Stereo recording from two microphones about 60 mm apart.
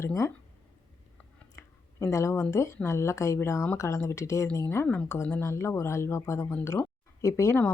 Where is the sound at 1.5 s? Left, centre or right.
Left.